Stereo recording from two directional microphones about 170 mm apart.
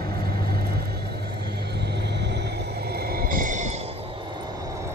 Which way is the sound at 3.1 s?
55° right (ahead or behind).